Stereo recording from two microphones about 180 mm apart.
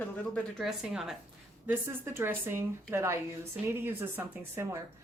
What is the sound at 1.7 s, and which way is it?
Speech, 15° right (ahead or behind).